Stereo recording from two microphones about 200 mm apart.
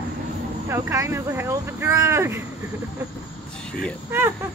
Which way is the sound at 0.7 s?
15° right (ahead or behind).